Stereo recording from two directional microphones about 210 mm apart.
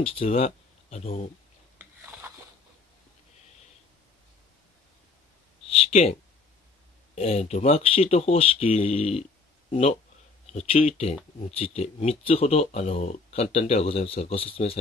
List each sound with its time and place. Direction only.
0.0 s speech: 25° left (ahead or behind)
5.9 s speech: 30° left (ahead or behind)
7.2 s speech: 30° left (ahead or behind)